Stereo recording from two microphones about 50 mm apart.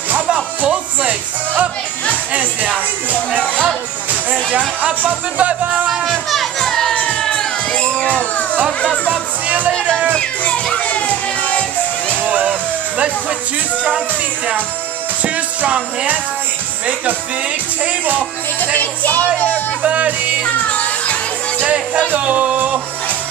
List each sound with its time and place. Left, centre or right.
2.3 s music: right
4.6 s music: right
5.9 s children playing: centre
6.6 s music: centre
9.1 s music: right
10.1 s music: left
12.1 s music: right
15.2 s music: right
18.8 s speech: left
19.8 s music: right
20.4 s music: left
22.2 s music: right